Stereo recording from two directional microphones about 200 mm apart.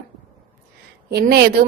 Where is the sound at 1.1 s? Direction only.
50° right (ahead or behind).